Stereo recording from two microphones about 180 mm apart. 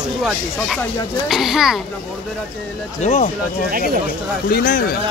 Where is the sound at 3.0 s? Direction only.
40° left (ahead or behind).